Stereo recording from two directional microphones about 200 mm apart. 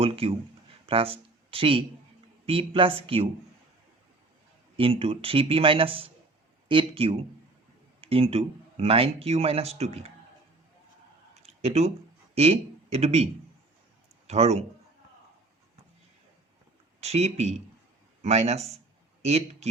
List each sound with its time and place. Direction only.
0.0 s speech: 30° right (ahead or behind)
4.8 s speech: 25° right (ahead or behind)
11.4 s a sound: 30° right (ahead or behind)
12.3 s speech: 30° right (ahead or behind)
14.3 s speech: 35° right (ahead or behind)
17.0 s speech: 30° right (ahead or behind)